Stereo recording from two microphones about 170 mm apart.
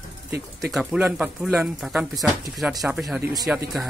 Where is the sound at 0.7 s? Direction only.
5° right (ahead or behind).